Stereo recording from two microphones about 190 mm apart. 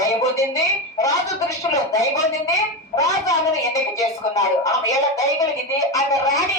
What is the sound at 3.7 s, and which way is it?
A woman's voice, 20° left (ahead or behind).